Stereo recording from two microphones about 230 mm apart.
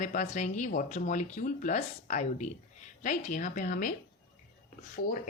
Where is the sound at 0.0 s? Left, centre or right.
Left.